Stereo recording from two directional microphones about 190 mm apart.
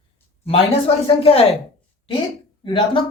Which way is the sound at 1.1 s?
30° left (ahead or behind).